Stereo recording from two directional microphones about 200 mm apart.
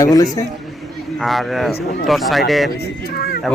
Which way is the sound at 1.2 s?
Centre (ahead or behind).